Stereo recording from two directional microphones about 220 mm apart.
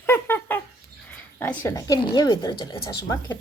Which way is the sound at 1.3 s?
10° left (ahead or behind).